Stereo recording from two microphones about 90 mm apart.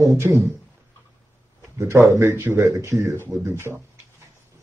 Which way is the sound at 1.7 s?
35° right (ahead or behind).